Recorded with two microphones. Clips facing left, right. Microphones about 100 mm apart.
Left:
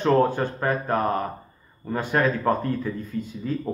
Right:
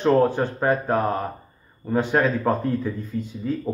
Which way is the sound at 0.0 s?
20° right (ahead or behind).